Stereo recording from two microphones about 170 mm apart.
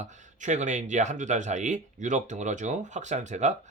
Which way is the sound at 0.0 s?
45° right (ahead or behind).